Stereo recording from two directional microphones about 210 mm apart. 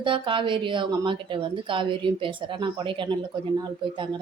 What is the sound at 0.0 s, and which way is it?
Speech, 25° right (ahead or behind).